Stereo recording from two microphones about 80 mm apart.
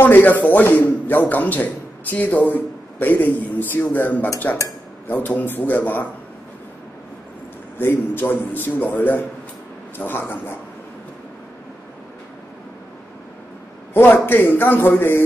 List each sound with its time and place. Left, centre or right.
0.0 s a man's voice: left
7.8 s a man's voice: left
13.9 s a man's voice: left